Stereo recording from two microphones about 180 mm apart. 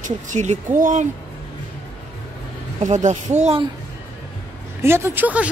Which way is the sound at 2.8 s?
40° right (ahead or behind).